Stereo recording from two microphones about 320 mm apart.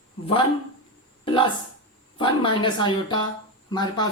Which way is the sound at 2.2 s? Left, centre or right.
Centre.